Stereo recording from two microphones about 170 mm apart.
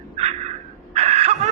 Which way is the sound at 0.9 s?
35° right (ahead or behind).